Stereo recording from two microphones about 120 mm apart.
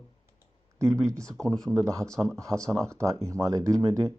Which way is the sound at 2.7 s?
25° right (ahead or behind).